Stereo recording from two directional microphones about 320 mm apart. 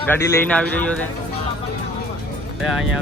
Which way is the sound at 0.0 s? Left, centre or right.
Centre.